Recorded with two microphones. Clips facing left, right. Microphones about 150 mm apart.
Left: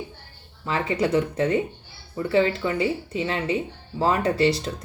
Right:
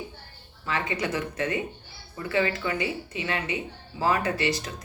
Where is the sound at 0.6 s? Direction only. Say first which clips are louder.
Left 5 dB; 30° left (ahead or behind).